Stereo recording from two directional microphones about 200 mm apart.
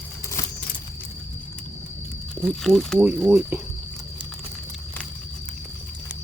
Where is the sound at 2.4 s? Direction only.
Centre (ahead or behind).